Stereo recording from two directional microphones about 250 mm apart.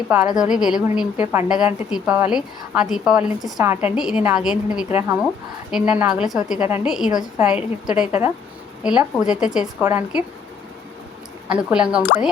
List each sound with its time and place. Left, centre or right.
0.1 s a woman's voice: centre
11.4 s a woman's voice: centre